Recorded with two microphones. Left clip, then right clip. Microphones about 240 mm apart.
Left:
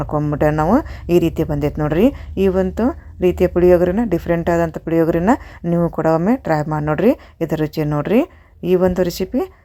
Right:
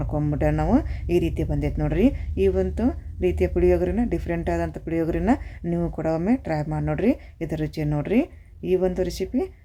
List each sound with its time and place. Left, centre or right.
0.0 s speech: centre